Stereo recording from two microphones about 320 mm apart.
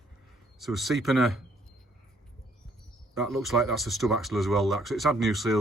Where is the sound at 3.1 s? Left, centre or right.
Centre.